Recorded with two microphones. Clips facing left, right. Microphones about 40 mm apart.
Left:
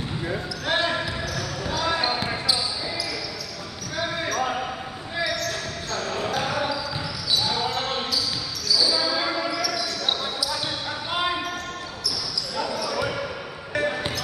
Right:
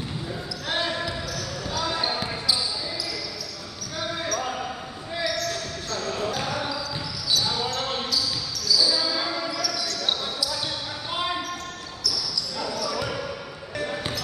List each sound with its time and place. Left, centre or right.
0.7 s basketball bounce: centre
3.9 s basketball bounce: centre
12.5 s basketball bounce: centre